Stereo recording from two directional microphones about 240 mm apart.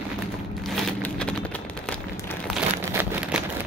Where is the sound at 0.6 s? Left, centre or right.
Centre.